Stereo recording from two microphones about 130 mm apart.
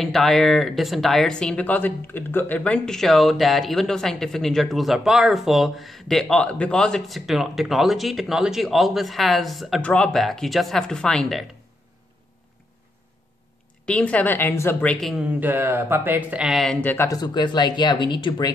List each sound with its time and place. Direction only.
0.0 s speech: centre (ahead or behind)
13.8 s a woman's voice: 10° left (ahead or behind)
15.0 s speech: centre (ahead or behind)
15.4 s speech: 15° right (ahead or behind)
16.8 s speech: 20° left (ahead or behind)
17.2 s speech: 35° left (ahead or behind)